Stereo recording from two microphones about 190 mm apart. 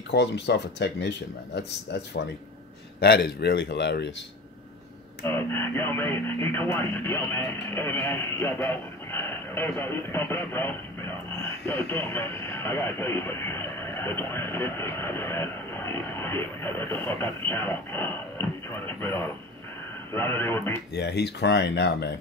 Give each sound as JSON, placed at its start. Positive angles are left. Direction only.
{"t": 0.1, "sound": "speech", "side_deg": 65}
{"t": 5.2, "sound": "speech", "side_deg": 10}
{"t": 20.9, "sound": "speech", "side_deg": 60}